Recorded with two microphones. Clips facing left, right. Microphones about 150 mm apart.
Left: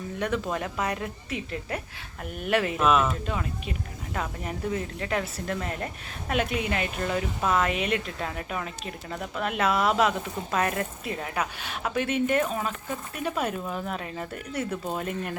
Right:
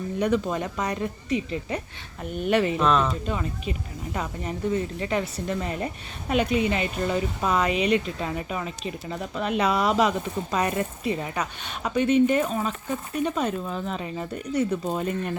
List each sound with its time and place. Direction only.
0.2 s speech: centre (ahead or behind)